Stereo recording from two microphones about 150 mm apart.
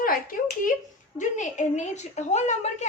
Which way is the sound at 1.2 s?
55° left (ahead or behind).